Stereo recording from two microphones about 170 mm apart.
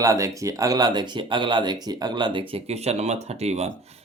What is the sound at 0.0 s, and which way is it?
Speech, 20° right (ahead or behind).